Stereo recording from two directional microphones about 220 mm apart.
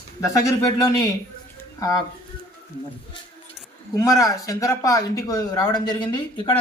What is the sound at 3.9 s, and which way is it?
A man's voice, 15° left (ahead or behind).